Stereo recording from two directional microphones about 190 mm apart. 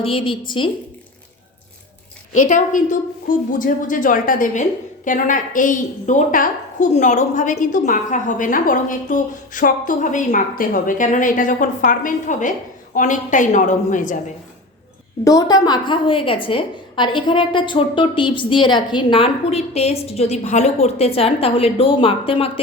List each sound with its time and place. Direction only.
0.0 s a woman's voice: 30° left (ahead or behind)
2.3 s a woman's voice: 40° left (ahead or behind)
15.2 s a woman's voice: 15° left (ahead or behind)